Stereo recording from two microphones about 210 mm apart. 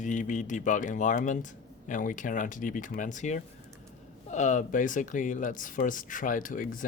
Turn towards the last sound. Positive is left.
turn(degrees=40)  # may be behind; listen again after turning